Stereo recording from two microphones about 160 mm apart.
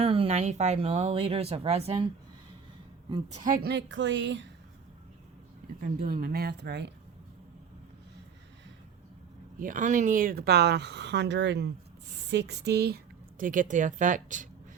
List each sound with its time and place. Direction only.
0.0 s a woman's voice: 35° right (ahead or behind)
3.2 s speech: 45° right (ahead or behind)
3.6 s speech: 90° right
5.8 s speech: 55° right (ahead or behind); by 6.9 s 90° right
9.6 s speech: 55° right (ahead or behind); by 13.0 s 90° right
13.4 s speech: 55° right (ahead or behind)